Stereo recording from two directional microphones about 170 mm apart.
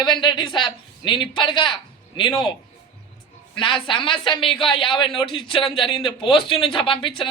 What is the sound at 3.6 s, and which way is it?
A man's voice, 30° left (ahead or behind).